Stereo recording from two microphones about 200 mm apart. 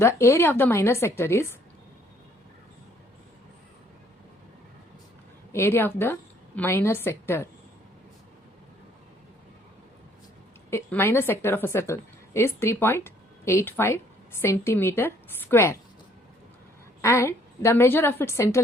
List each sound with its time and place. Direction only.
0.0 s a woman's voice: 15° left (ahead or behind)
5.5 s a woman's voice: 10° left (ahead or behind)
10.7 s a woman's voice: 10° left (ahead or behind)
17.0 s a woman's voice: 15° left (ahead or behind)